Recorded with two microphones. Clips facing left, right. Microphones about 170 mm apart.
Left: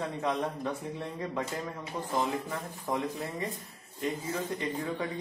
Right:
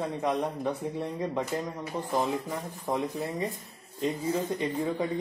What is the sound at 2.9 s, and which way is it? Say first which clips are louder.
Speech: right 3 dB; 20° right (ahead or behind).